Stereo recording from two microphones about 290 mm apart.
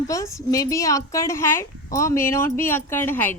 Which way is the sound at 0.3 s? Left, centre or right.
Centre.